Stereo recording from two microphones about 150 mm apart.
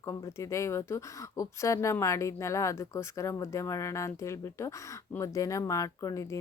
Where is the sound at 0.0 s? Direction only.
20° left (ahead or behind).